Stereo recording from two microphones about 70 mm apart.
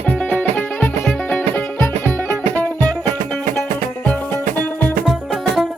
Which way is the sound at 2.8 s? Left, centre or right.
Centre.